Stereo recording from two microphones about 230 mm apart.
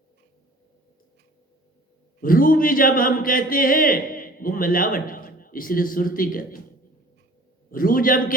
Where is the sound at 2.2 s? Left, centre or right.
Left.